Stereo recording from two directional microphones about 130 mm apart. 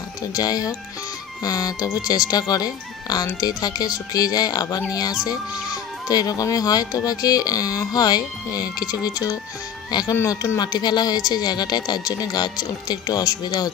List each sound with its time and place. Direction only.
0.3 s speech: 30° left (ahead or behind)
6.0 s speech: 30° left (ahead or behind)